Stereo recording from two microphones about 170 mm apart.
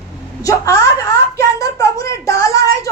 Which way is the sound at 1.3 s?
20° left (ahead or behind).